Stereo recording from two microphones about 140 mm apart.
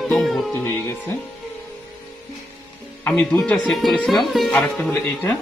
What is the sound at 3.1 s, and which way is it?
Speech, 5° left (ahead or behind).